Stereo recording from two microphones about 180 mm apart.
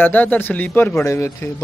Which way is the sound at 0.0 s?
10° left (ahead or behind).